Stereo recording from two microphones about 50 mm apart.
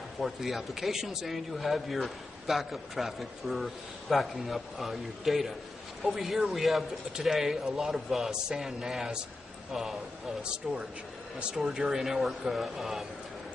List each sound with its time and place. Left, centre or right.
0.2 s speech: centre
10.4 s speech: centre